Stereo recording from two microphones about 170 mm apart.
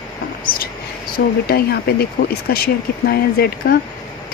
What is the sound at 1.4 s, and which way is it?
Speech, 65° left (ahead or behind).